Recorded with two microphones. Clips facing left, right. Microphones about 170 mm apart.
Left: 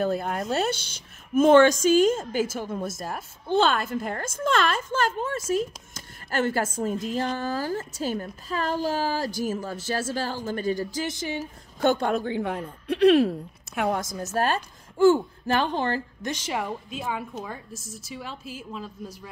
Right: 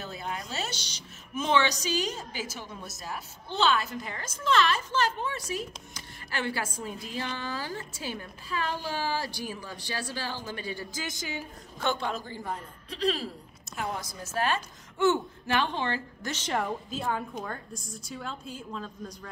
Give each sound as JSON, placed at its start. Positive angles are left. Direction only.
{"t": 0.0, "sound": "a woman's voice", "side_deg": 55}
{"t": 11.1, "sound": "speech", "side_deg": 30}
{"t": 11.8, "sound": "a woman's voice", "side_deg": 45}
{"t": 16.3, "sound": "a woman's voice", "side_deg": 10}